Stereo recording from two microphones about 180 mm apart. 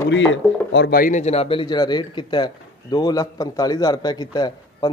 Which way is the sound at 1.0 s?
45° left (ahead or behind).